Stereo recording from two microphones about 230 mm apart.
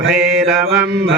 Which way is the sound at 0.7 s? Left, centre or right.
Right.